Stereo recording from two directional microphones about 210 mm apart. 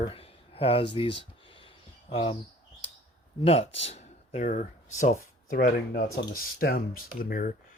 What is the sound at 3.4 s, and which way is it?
Speech, 30° left (ahead or behind).